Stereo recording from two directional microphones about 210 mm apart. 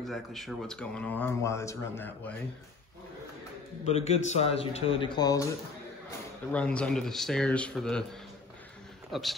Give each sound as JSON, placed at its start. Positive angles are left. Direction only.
{"t": 0.0, "sound": "speech", "side_deg": 0}
{"t": 3.8, "sound": "speech", "side_deg": 30}
{"t": 6.5, "sound": "speech", "side_deg": 5}
{"t": 9.1, "sound": "speech", "side_deg": 0}